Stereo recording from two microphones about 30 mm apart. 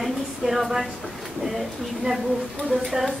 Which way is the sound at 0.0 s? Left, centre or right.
Centre.